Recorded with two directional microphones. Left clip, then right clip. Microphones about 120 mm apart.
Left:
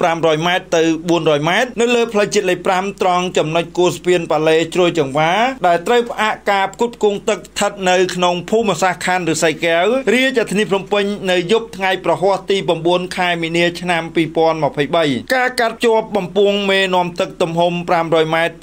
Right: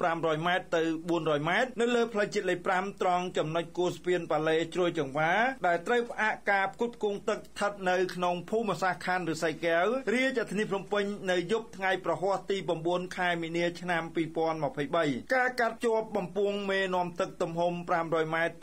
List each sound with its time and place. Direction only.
0.0 s a man's voice: 20° left (ahead or behind)